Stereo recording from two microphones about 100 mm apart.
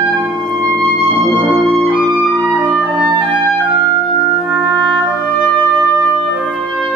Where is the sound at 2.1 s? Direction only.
15° right (ahead or behind).